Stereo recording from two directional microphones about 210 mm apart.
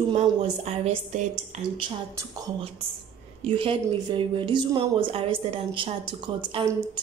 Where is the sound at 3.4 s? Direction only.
25° right (ahead or behind).